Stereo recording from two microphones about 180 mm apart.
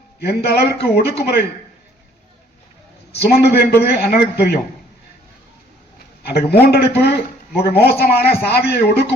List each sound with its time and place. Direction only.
0.2 s a man's voice: 60° left (ahead or behind)
3.2 s a man's voice: 65° left (ahead or behind)
6.2 s a man's voice: 60° left (ahead or behind)